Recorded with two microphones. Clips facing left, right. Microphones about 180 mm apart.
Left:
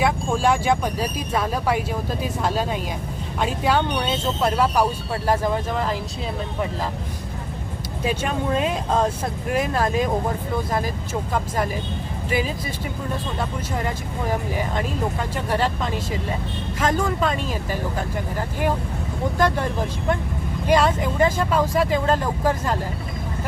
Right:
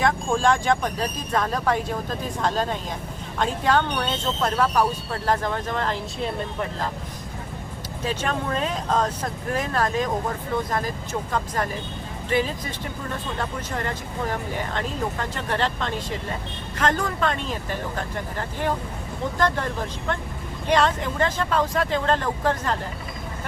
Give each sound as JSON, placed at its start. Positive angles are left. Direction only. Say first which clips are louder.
{"t": 0.0, "sound": "speech", "louder": "left 1 dB", "side_deg": 10}
{"t": 8.0, "sound": "speech", "louder": "left 3 dB", "side_deg": 10}
{"t": 11.3, "sound": "speech", "louder": "left 2 dB", "side_deg": 10}
{"t": 20.7, "sound": "speech", "louder": "left 2 dB", "side_deg": 10}